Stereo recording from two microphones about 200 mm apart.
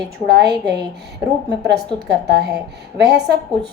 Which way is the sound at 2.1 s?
55° right (ahead or behind).